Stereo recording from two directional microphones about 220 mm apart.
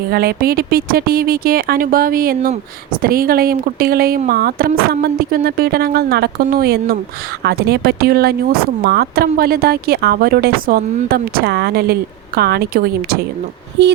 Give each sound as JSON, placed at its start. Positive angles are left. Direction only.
{"t": 0.1, "sound": "speech", "side_deg": -45}